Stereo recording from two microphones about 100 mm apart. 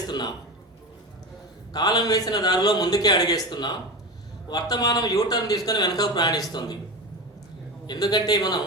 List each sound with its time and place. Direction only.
0.1 s throat clearing: 45° left (ahead or behind)
1.7 s a man's voice: 40° left (ahead or behind)
7.9 s a man's voice: 45° left (ahead or behind)